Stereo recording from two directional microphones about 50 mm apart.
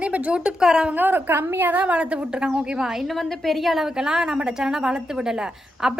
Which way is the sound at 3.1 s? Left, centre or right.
Centre.